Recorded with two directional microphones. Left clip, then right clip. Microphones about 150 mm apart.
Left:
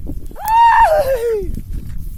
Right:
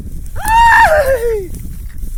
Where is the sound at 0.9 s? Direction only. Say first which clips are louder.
Right 3 dB; 20° left (ahead or behind).